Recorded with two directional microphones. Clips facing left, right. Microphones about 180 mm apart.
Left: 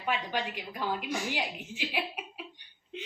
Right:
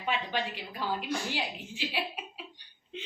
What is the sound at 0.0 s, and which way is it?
A woman's voice, 10° left (ahead or behind).